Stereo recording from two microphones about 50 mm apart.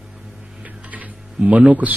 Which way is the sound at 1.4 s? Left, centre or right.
Right.